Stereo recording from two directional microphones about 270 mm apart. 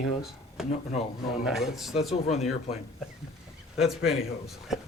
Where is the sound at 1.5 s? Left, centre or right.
Centre.